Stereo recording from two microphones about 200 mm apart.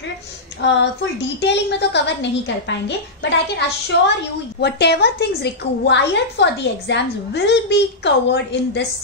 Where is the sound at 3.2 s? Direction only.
60° left (ahead or behind).